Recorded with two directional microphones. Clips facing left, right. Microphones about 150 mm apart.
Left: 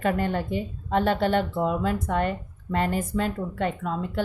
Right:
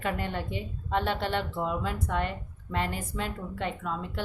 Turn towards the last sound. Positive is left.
turn(degrees=45)  # may be behind; listen again after turning